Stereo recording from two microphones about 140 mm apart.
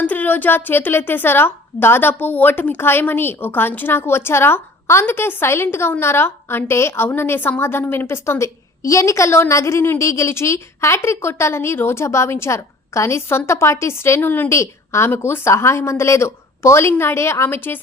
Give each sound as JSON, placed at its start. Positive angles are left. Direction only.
{"t": 0.0, "sound": "a woman's voice", "side_deg": 10}